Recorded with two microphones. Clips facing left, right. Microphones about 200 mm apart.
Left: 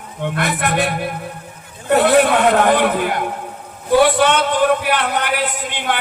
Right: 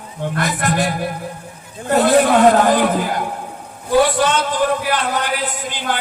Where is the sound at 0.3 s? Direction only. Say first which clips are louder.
Even; 60° left (ahead or behind).